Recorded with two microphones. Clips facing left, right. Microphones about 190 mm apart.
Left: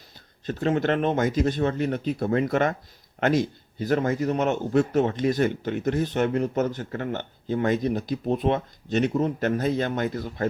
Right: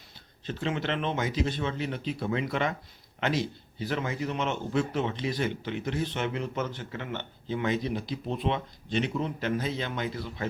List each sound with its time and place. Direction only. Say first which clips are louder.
0.4 s a man's voice: left 7 dB; 45° left (ahead or behind)